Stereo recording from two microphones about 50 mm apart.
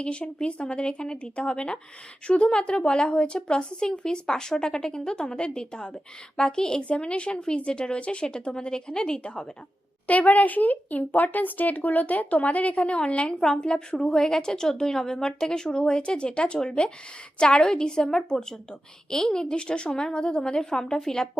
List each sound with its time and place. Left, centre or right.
0.0 s speech: left
10.1 s speech: left; by 21.2 s centre